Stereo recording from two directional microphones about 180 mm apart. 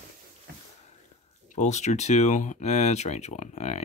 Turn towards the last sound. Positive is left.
turn(degrees=40)  # may be behind; listen again after turning